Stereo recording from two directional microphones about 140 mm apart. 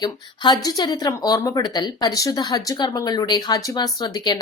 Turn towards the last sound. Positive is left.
turn(degrees=30)  # may be behind; listen again after turning